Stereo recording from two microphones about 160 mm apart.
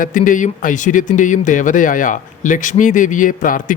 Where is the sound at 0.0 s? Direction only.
55° left (ahead or behind).